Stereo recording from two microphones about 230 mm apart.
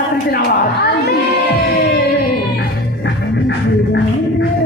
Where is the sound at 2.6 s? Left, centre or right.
Left.